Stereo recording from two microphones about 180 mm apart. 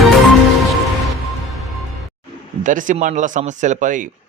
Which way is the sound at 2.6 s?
45° right (ahead or behind).